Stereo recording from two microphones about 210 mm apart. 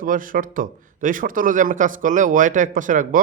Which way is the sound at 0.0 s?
40° right (ahead or behind).